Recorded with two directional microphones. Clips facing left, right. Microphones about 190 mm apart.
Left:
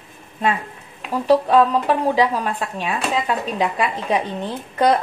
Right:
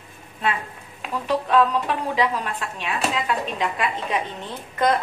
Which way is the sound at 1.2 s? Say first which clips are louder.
Left 5 dB; 40° left (ahead or behind).